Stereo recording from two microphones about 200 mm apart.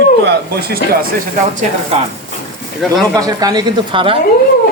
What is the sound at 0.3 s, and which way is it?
Speech, 50° right (ahead or behind).